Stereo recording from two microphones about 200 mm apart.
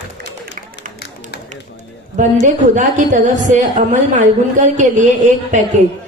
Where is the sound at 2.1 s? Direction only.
40° right (ahead or behind).